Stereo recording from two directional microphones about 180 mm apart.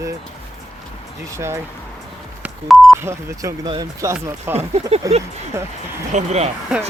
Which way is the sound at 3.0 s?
15° right (ahead or behind).